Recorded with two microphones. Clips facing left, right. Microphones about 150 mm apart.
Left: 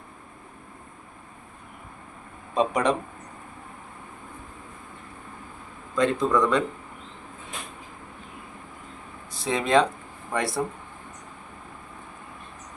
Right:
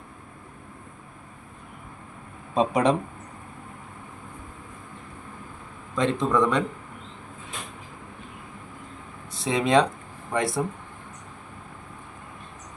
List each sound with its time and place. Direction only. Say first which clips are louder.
2.6 s speech: right 2 dB; 30° right (ahead or behind)
6.0 s speech: left 1 dB; 20° right (ahead or behind)
9.3 s speech: right 1 dB; 20° right (ahead or behind)